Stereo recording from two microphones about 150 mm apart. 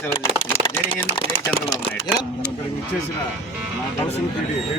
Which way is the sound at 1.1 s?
35° left (ahead or behind).